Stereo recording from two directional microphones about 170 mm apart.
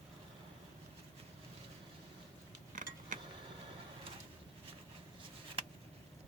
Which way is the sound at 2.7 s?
50° right (ahead or behind).